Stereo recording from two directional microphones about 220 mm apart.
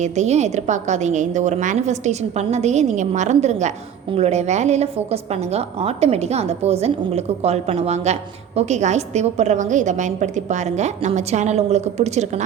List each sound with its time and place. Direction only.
0.0 s a woman's voice: 30° right (ahead or behind)